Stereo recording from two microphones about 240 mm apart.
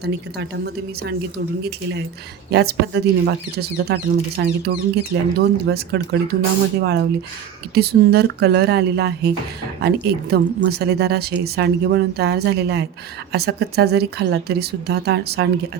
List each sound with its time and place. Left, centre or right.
0.0 s speech: right